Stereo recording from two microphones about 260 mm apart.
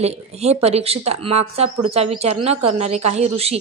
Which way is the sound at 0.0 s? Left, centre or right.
Right.